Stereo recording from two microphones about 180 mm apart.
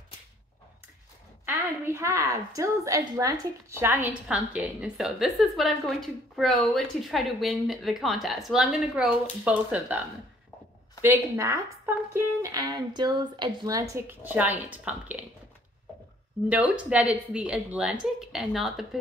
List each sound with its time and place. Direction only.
1.4 s a woman's voice: 15° right (ahead or behind)
16.4 s a woman's voice: 5° right (ahead or behind)